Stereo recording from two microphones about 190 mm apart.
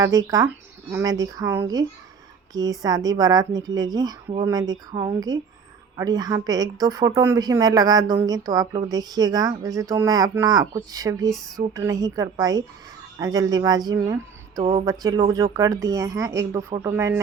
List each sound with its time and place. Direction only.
0.0 s a woman's voice: 20° right (ahead or behind)
11.3 s a sound: centre (ahead or behind)
11.7 s a woman's voice: 15° right (ahead or behind)